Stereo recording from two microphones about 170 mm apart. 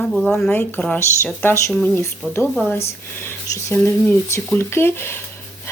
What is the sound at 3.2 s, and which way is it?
Speech, 15° left (ahead or behind).